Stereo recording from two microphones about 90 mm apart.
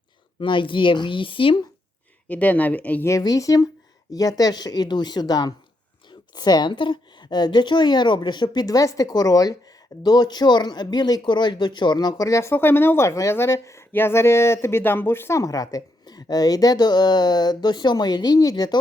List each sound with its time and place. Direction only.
0.3 s speech: 65° left (ahead or behind)
2.2 s speech: 15° left (ahead or behind)
3.1 s a woman's voice: 40° left (ahead or behind)